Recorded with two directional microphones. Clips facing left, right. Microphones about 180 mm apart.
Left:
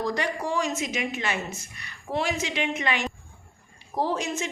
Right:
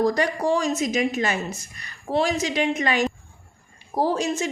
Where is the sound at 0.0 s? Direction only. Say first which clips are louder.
Right 7 dB; 40° right (ahead or behind).